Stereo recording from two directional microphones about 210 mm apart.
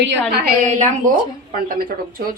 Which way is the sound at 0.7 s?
35° right (ahead or behind).